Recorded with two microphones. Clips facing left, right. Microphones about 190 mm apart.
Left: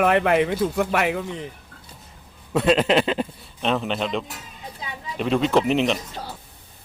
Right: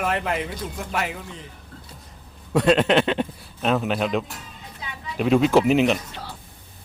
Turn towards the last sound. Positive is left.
turn(degrees=-5)  # may be behind; listen again after turning